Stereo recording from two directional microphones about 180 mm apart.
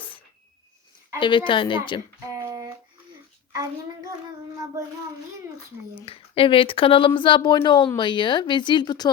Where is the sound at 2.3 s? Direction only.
20° right (ahead or behind).